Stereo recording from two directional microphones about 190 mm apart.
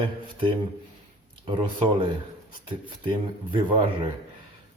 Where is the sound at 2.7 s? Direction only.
25° right (ahead or behind).